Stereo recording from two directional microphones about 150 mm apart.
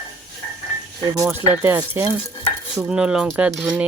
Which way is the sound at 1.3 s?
15° right (ahead or behind).